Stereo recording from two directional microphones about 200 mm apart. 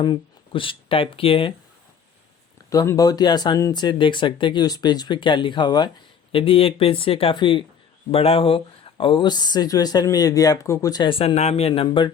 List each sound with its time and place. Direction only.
0.0 s speech: 25° left (ahead or behind)
2.6 s speech: 15° left (ahead or behind)